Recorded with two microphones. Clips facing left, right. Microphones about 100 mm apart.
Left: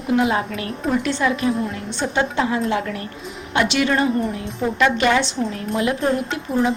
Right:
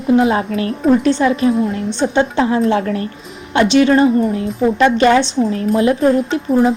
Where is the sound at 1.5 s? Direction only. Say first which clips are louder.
Right 7 dB; centre (ahead or behind).